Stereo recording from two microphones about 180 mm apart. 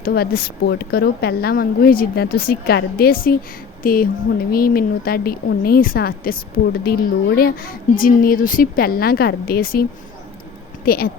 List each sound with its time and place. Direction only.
0.0 s speech: 60° left (ahead or behind)
10.8 s speech: 60° left (ahead or behind)